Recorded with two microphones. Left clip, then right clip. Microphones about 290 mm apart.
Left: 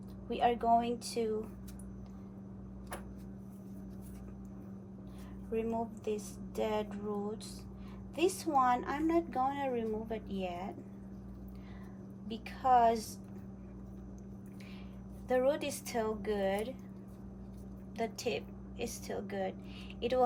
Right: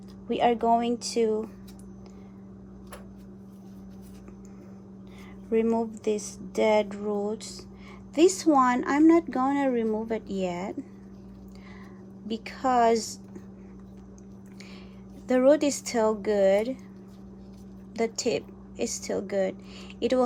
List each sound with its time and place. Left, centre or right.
0.3 s a woman's voice: right
5.5 s a woman's voice: right
12.3 s a woman's voice: right
15.3 s a woman's voice: right
17.9 s a woman's voice: right